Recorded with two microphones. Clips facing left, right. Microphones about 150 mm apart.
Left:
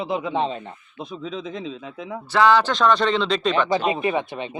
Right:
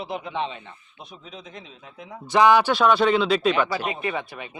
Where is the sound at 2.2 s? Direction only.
15° right (ahead or behind).